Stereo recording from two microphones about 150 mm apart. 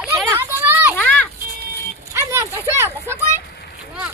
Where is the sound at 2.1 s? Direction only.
20° right (ahead or behind).